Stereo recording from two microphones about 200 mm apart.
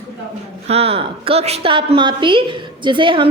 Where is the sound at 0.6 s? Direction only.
30° right (ahead or behind).